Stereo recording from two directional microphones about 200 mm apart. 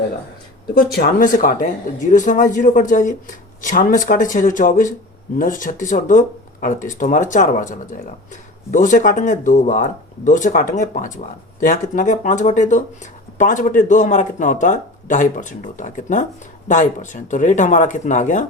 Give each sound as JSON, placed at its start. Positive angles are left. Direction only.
{"t": 0.7, "sound": "speech", "side_deg": 50}